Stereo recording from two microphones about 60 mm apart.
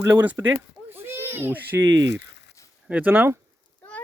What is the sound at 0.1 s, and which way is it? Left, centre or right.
Speech, right.